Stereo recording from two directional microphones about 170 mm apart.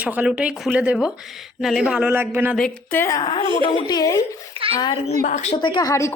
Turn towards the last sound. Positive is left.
turn(degrees=15)  # may be behind; listen again after turning